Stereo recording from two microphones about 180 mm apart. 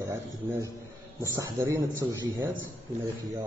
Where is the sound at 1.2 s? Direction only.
15° right (ahead or behind).